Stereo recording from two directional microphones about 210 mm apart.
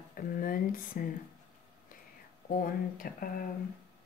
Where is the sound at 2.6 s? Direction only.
40° left (ahead or behind).